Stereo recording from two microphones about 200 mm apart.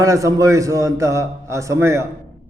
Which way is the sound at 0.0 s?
15° right (ahead or behind).